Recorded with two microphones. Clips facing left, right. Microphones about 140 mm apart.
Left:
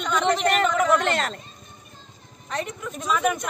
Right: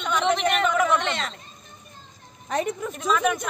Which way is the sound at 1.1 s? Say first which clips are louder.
Left 4 dB; 45° left (ahead or behind).